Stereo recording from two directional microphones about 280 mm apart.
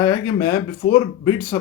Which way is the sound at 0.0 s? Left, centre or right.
Centre.